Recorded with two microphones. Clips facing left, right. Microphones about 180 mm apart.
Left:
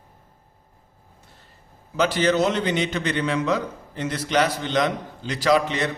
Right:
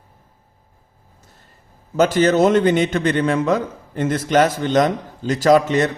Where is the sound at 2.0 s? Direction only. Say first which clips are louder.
Right 6 dB; 45° right (ahead or behind).